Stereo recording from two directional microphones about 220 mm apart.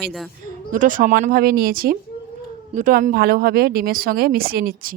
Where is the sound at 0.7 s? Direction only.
35° right (ahead or behind).